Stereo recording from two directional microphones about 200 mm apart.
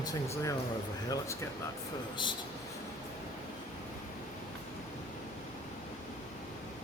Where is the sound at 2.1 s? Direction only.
25° left (ahead or behind).